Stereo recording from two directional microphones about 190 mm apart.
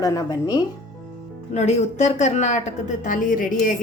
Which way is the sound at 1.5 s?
35° left (ahead or behind).